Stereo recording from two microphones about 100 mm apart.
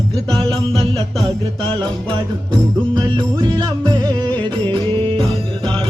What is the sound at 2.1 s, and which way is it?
Music, 45° right (ahead or behind).